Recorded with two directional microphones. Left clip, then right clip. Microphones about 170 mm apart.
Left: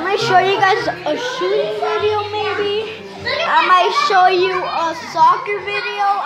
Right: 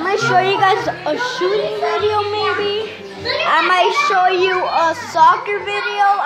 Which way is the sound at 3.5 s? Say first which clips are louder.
Left 2 dB; 15° right (ahead or behind).